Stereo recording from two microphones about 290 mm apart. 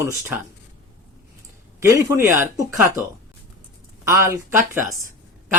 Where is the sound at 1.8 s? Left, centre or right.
Centre.